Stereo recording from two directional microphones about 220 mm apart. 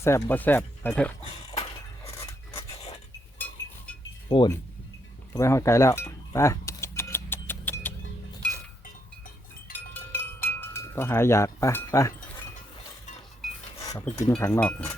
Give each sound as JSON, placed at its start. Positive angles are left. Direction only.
{"t": 0.0, "sound": "speech", "side_deg": 10}
{"t": 3.3, "sound": "chink", "side_deg": 10}
{"t": 4.3, "sound": "speech", "side_deg": 20}
{"t": 5.3, "sound": "keys jangling", "side_deg": 15}
{"t": 9.7, "sound": "a sound", "side_deg": 10}
{"t": 13.7, "sound": "speech", "side_deg": 15}